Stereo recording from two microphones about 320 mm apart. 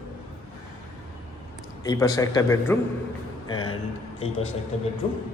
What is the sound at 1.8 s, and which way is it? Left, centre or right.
Speech, centre.